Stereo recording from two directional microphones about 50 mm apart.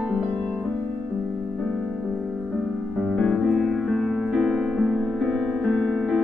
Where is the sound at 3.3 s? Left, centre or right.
Centre.